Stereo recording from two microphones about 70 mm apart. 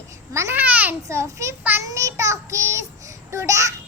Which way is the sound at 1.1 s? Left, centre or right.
Right.